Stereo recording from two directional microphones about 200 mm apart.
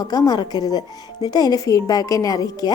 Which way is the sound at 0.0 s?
20° left (ahead or behind).